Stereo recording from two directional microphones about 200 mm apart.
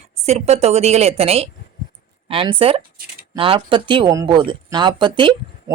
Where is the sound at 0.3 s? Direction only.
35° right (ahead or behind).